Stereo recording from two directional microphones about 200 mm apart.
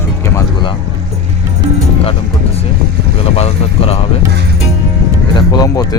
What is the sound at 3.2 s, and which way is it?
Speech, 30° left (ahead or behind).